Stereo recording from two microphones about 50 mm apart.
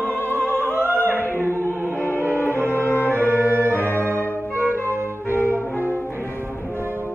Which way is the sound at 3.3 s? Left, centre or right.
Right.